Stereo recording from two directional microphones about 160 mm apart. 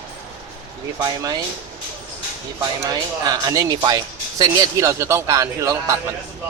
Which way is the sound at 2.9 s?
25° right (ahead or behind).